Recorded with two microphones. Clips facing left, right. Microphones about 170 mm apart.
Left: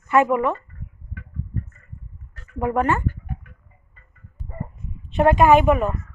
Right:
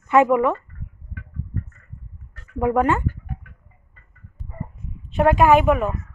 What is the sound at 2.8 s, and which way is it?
Speech, 15° right (ahead or behind).